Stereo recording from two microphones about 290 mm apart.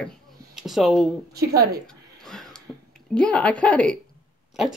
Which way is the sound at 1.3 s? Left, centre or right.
Right.